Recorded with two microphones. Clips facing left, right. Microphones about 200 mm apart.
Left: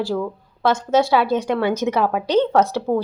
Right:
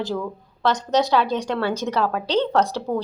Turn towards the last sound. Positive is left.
turn(degrees=15)  # may be behind; listen again after turning